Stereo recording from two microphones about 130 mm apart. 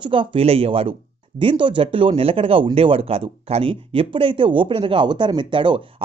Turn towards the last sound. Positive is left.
turn(degrees=-40)  # may be behind; listen again after turning